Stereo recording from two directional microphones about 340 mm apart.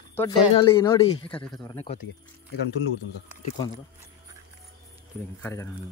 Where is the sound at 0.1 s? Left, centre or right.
Centre.